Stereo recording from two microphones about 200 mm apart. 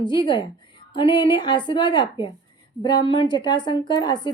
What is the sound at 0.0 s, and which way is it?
A woman's voice, 20° left (ahead or behind).